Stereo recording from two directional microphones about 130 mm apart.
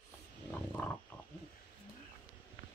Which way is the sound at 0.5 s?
10° left (ahead or behind).